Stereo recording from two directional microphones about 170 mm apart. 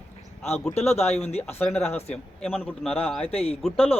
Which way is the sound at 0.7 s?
40° left (ahead or behind).